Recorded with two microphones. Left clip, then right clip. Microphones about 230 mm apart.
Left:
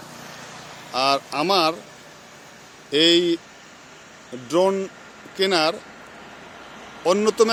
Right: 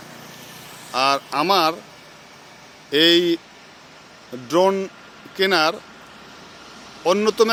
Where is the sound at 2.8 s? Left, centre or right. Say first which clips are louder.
Right 2 dB; centre.